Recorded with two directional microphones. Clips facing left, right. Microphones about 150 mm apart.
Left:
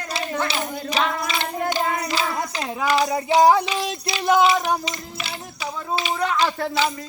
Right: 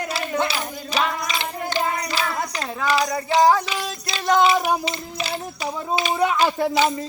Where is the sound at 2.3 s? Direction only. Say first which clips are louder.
Even; 20° left (ahead or behind).